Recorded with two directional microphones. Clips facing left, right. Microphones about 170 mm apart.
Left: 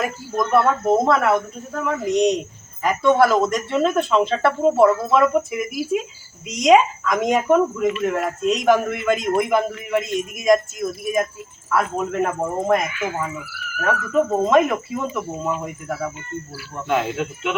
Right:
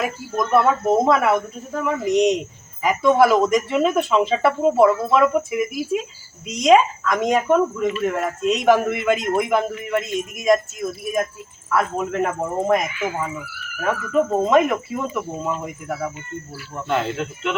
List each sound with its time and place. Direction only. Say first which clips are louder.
0.0 s speech: even; 5° right (ahead or behind)